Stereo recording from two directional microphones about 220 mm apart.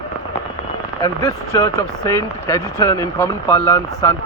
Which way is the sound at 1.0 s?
15° left (ahead or behind).